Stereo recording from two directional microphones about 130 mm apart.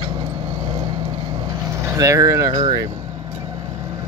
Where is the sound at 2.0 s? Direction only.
25° right (ahead or behind).